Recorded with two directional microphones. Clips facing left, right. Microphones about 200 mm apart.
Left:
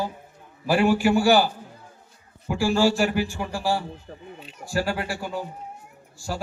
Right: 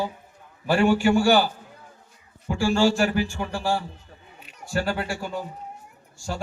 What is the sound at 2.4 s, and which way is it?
A man's voice, 5° left (ahead or behind).